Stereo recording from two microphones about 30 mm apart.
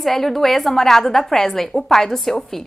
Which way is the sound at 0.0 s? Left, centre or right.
Centre.